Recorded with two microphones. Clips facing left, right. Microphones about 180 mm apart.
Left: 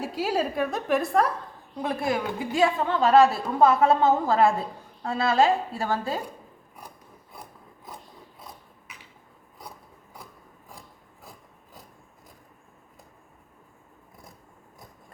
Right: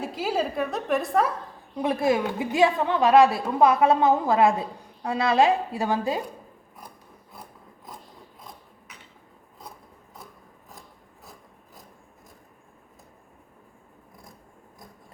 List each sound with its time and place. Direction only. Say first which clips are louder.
0.0 s a woman's voice: even; centre (ahead or behind)
1.8 s a woman's voice: right 4 dB; 20° right (ahead or behind)